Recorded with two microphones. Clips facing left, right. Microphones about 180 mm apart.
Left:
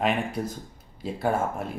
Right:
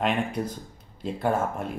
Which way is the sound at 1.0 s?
10° left (ahead or behind).